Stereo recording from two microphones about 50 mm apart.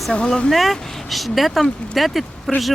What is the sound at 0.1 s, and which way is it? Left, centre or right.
Speech, centre.